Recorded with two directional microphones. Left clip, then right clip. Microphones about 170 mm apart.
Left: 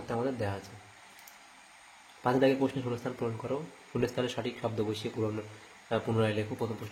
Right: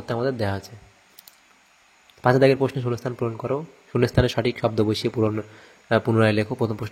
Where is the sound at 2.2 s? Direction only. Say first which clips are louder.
Right 9 dB; 45° right (ahead or behind).